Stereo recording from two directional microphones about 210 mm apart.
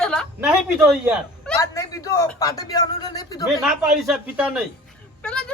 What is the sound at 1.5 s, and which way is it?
Speech, 15° left (ahead or behind).